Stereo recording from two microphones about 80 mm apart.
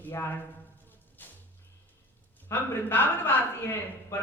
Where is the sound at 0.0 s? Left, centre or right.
Left.